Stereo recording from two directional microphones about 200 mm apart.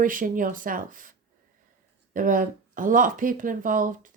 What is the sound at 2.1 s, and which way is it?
Speech, 40° right (ahead or behind).